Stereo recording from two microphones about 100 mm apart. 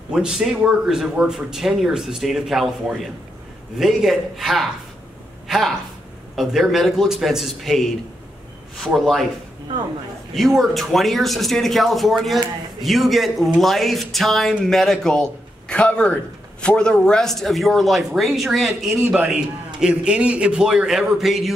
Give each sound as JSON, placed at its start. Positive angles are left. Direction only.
{"t": 0.1, "sound": "speech", "side_deg": -5}
{"t": 10.3, "sound": "speech", "side_deg": 0}
{"t": 19.0, "sound": "a man's voice", "side_deg": -15}